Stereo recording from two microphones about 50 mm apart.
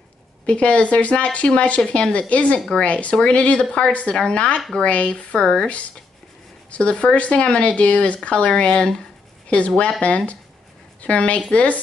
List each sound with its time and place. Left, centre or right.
0.5 s speech: left
6.7 s speech: left